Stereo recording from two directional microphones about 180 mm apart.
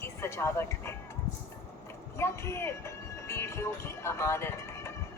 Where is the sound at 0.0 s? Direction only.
15° left (ahead or behind).